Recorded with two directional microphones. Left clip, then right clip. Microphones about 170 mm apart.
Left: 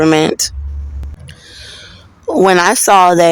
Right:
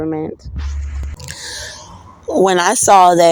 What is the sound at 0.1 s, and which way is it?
Speech, 45° left (ahead or behind).